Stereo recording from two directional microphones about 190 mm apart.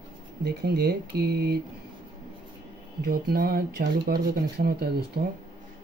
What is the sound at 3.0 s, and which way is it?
A man's voice, 55° right (ahead or behind).